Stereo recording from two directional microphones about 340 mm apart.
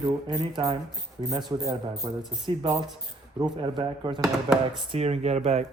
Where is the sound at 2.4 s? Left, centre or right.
Centre.